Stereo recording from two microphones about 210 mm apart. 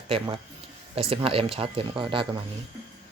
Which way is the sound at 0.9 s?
25° right (ahead or behind).